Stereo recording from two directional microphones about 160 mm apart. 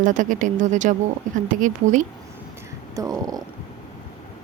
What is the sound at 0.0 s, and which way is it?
Speech, 50° right (ahead or behind).